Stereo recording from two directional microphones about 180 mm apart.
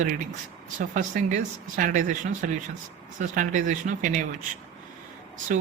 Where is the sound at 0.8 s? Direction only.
45° right (ahead or behind).